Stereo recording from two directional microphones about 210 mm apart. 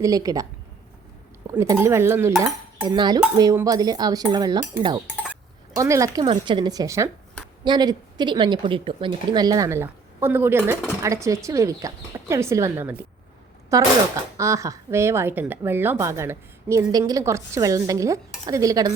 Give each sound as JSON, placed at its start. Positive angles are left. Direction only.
{"t": 0.0, "sound": "a woman's voice", "side_deg": -15}
{"t": 1.5, "sound": "a woman's voice", "side_deg": -15}